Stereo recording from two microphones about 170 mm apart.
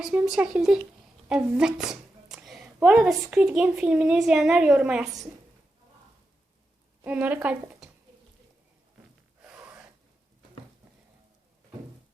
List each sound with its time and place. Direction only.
0.0 s speech: 5° right (ahead or behind)
7.0 s a woman's voice: 10° right (ahead or behind)
9.4 s gasp: 5° right (ahead or behind)